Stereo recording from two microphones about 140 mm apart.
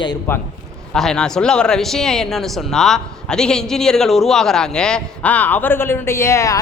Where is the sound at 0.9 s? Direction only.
5° left (ahead or behind).